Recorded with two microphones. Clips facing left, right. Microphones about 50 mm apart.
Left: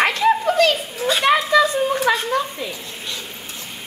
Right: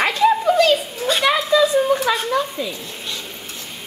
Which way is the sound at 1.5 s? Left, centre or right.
Left.